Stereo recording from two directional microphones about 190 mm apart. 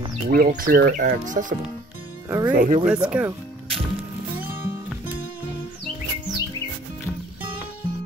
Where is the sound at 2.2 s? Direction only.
10° right (ahead or behind).